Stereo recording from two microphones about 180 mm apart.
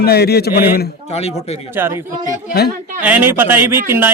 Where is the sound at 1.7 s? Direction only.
10° right (ahead or behind).